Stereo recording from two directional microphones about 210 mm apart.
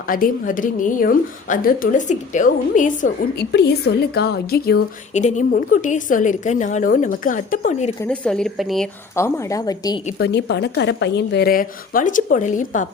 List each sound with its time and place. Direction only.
0.1 s a woman's voice: 40° left (ahead or behind)
3.5 s a woman's voice: 50° left (ahead or behind)
5.1 s a woman's voice: 35° left (ahead or behind)
8.0 s speech: 5° left (ahead or behind)
9.1 s a woman's voice: 15° left (ahead or behind)
10.1 s a woman's voice: 50° left (ahead or behind)